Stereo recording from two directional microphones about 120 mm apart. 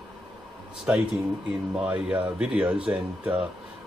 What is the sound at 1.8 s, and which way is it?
Speech, 10° right (ahead or behind).